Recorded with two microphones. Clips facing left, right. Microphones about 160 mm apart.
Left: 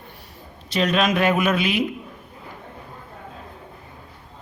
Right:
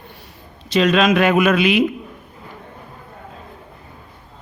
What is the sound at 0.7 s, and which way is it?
Speech, 90° right.